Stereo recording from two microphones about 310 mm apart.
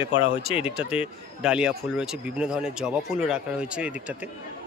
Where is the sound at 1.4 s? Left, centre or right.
Centre.